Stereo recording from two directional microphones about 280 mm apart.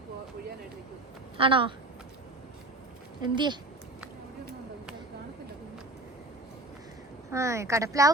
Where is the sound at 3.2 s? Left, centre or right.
Centre.